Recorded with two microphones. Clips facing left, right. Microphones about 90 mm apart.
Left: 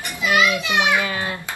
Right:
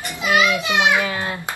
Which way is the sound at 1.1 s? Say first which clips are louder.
Right 1 dB; 5° right (ahead or behind).